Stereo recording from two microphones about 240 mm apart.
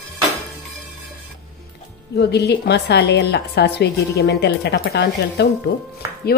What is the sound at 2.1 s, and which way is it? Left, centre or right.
A woman's voice, left.